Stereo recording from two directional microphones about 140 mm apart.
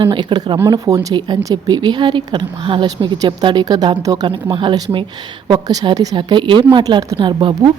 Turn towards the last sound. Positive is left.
turn(degrees=-35)  # may be behind; listen again after turning